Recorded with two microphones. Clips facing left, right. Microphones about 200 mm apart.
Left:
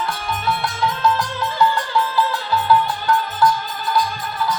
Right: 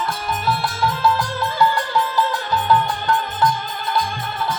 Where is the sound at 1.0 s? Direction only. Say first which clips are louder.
Even; 10° right (ahead or behind).